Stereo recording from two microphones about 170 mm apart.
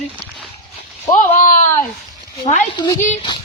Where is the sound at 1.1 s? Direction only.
50° left (ahead or behind).